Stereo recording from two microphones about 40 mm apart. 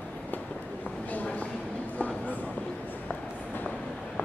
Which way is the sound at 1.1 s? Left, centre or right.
Left.